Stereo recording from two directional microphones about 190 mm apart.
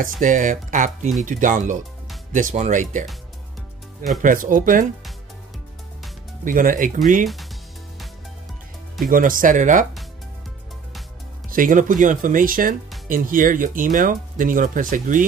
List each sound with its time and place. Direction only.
0.0 s speech: 45° right (ahead or behind)
4.2 s speech: 45° right (ahead or behind)
6.4 s speech: 45° right (ahead or behind)
9.1 s speech: 45° right (ahead or behind)
11.5 s speech: 45° right (ahead or behind)